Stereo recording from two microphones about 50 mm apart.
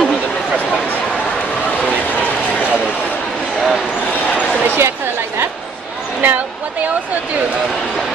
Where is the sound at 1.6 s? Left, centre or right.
Left.